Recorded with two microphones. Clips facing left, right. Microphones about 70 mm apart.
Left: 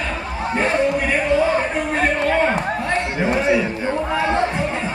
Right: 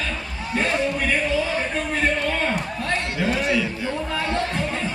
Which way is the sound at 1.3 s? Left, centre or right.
Left.